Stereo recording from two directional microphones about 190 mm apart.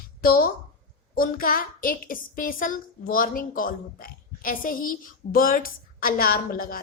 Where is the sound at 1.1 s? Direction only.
50° left (ahead or behind).